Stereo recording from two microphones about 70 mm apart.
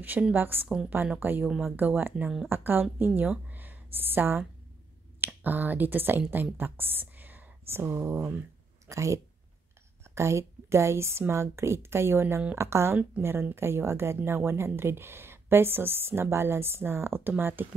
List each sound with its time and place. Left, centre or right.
0.0 s a woman's voice: right